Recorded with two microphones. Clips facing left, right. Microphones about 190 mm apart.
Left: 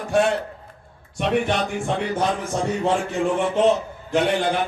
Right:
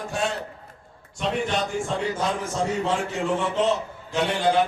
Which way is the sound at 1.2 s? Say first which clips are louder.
Left 4 dB; 60° left (ahead or behind).